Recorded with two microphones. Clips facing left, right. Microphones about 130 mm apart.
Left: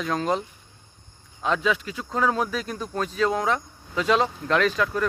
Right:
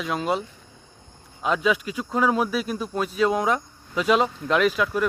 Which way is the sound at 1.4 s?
10° right (ahead or behind).